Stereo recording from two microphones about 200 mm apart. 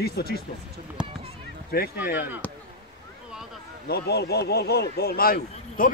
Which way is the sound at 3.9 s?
55° left (ahead or behind).